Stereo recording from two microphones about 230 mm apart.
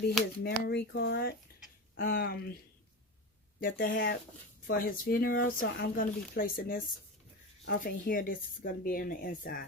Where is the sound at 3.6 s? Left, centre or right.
Left.